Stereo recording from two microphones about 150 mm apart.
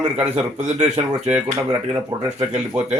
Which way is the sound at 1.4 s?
30° right (ahead or behind).